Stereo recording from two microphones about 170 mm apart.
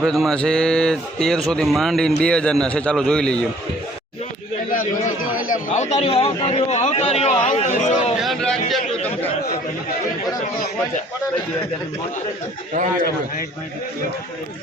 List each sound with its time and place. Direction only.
0.0 s speech: centre (ahead or behind)
4.7 s a man's voice: 55° left (ahead or behind)
8.2 s speech: centre (ahead or behind)